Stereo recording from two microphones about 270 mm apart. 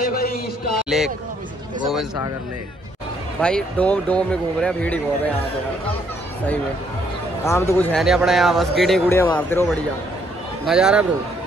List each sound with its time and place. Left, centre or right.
0.1 s a sound: left
0.8 s speech: centre
3.3 s speech: centre
7.4 s speech: centre
10.6 s speech: centre